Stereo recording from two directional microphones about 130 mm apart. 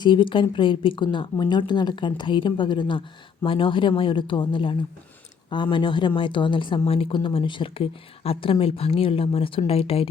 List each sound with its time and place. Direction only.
0.0 s a woman's voice: 40° left (ahead or behind)